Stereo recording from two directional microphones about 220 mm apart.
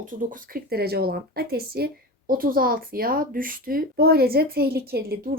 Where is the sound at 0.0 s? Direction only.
35° right (ahead or behind).